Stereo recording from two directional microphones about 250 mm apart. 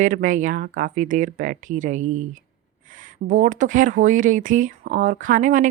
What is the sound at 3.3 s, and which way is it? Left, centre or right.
A woman's voice, right.